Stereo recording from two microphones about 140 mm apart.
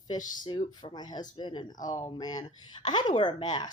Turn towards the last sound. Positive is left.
turn(degrees=30)  # may be behind; listen again after turning